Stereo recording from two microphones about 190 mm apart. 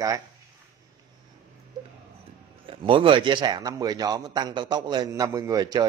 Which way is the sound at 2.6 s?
25° right (ahead or behind).